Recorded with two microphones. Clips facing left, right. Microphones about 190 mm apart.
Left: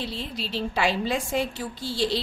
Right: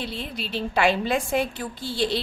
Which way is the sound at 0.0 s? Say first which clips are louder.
Even; 55° right (ahead or behind).